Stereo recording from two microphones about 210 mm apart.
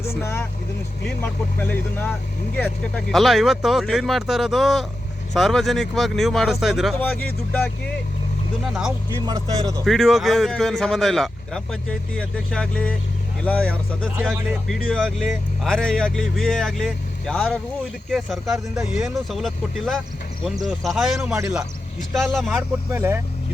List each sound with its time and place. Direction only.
0.0 s speech: 10° left (ahead or behind)
8.6 s speech: 5° right (ahead or behind)
9.0 s speech: 20° right (ahead or behind)
9.8 s speech: centre (ahead or behind)
22.5 s speech: 10° right (ahead or behind)